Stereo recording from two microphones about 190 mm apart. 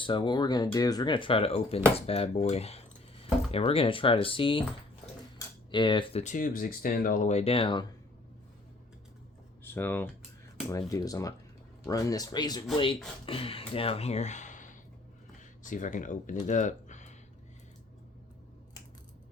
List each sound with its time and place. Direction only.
0.0 s speech: 25° left (ahead or behind)
5.7 s speech: 25° left (ahead or behind)
6.2 s speech: 45° left (ahead or behind); by 7.9 s 25° left (ahead or behind)
9.6 s speech: 10° left (ahead or behind); by 17.2 s 40° left (ahead or behind)